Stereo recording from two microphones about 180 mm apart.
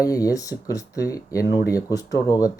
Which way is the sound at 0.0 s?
20° left (ahead or behind).